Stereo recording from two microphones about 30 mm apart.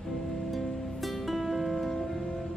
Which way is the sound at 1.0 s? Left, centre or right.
Centre.